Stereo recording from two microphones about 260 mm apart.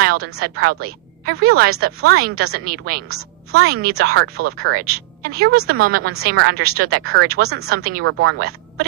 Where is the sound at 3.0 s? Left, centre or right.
Right.